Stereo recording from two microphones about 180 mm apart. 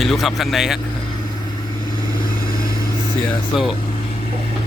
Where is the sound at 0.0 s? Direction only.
Centre (ahead or behind).